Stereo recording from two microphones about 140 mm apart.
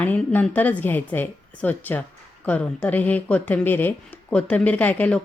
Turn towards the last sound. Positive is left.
turn(degrees=10)  # may be behind; listen again after turning